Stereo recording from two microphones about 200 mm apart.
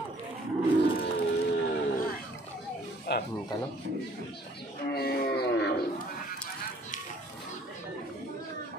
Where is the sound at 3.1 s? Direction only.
55° left (ahead or behind).